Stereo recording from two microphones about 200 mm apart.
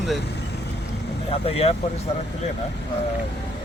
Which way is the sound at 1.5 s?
30° left (ahead or behind).